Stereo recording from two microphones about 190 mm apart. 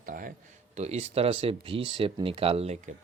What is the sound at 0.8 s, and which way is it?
Speech, 35° right (ahead or behind).